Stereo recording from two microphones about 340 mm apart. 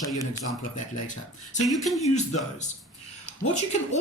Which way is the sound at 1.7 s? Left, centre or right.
Centre.